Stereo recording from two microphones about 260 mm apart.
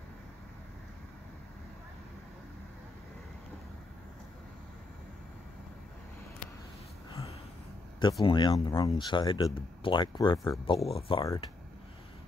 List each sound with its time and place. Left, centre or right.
8.2 s speech: centre